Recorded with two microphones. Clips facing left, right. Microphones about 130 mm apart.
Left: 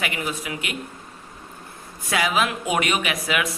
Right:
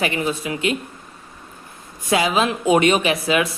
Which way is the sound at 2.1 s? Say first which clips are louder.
Right 4 dB; 25° right (ahead or behind).